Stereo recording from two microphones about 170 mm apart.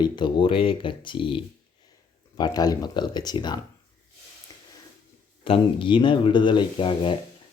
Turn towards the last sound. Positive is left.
turn(degrees=30)  # may be behind; listen again after turning